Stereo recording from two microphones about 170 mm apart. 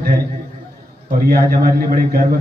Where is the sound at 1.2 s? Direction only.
65° right (ahead or behind).